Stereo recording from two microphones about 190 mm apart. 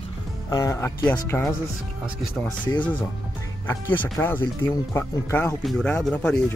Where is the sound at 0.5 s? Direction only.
15° left (ahead or behind).